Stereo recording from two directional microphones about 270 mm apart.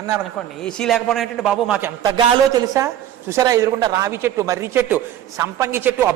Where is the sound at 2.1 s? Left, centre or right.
Centre.